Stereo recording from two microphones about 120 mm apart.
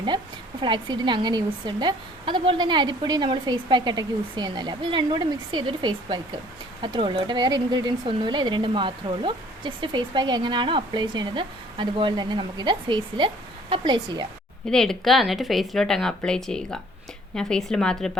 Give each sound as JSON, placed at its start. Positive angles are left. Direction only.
{"t": 0.6, "sound": "speech", "side_deg": -40}
{"t": 14.7, "sound": "speech", "side_deg": 5}